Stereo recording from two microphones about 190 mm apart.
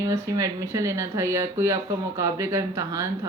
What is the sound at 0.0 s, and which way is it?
A woman's voice, 15° right (ahead or behind).